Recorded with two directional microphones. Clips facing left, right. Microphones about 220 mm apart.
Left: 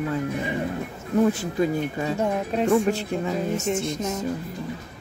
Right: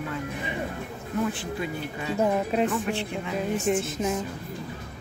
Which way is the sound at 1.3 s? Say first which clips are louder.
Left 7 dB; 40° left (ahead or behind).